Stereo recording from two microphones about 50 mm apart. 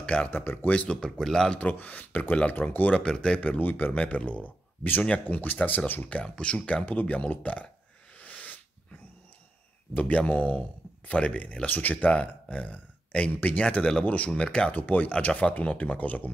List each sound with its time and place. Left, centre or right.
0.0 s speech: left
0.4 s speech: left
0.8 s speech: centre
1.6 s speech: left
3.0 s speech: centre
3.3 s speech: left
5.2 s speech: left
6.2 s speech: left
6.9 s speech: left
8.2 s sneeze: left
9.9 s speech: left
13.6 s speech: left
14.8 s speech: left